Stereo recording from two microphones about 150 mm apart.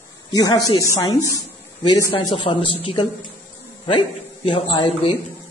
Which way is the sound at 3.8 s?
35° left (ahead or behind).